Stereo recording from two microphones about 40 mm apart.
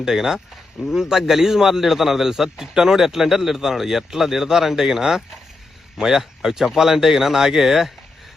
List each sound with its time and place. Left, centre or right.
0.0 s a man's voice: centre